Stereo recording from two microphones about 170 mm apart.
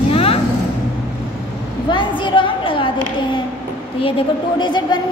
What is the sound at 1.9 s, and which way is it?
A woman's voice, 30° left (ahead or behind).